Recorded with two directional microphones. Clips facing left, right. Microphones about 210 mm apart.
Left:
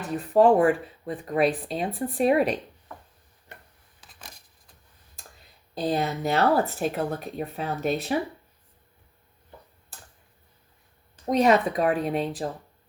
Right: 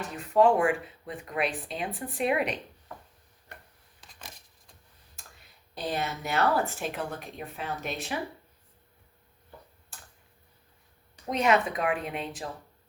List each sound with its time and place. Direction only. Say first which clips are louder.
0.1 s speech: left 4 dB; 35° left (ahead or behind)
4.0 s a sound: even; centre (ahead or behind)
5.9 s speech: left 6 dB; 35° left (ahead or behind)
11.3 s speech: left 5 dB; 35° left (ahead or behind)